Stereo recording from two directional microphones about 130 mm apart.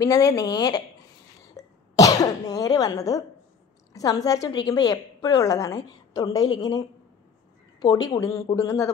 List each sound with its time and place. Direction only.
0.0 s a woman's voice: 25° left (ahead or behind)